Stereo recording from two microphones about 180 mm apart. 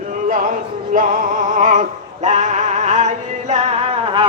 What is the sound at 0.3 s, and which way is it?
Music, 50° right (ahead or behind).